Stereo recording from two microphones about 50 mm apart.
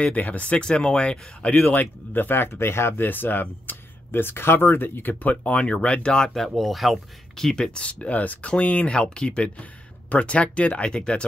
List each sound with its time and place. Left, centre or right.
0.0 s speech: left
1.6 s speech: left
2.9 s speech: left
5.2 s speech: left
6.3 s speech: centre
7.3 s speech: centre